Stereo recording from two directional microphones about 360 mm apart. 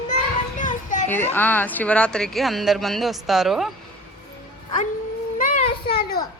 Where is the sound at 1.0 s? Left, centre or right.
Centre.